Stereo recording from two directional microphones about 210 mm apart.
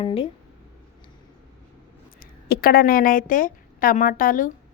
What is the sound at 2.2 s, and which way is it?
A woman's voice, 45° left (ahead or behind).